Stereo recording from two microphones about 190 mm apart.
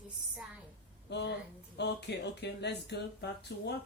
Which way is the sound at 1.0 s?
65° left (ahead or behind).